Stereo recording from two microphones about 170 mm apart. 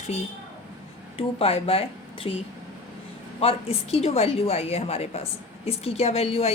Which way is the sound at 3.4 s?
35° left (ahead or behind).